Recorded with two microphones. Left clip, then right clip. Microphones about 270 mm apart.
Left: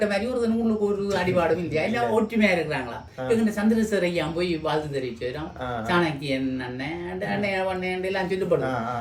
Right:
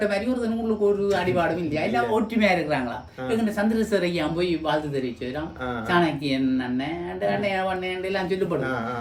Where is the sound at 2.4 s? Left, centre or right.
Centre.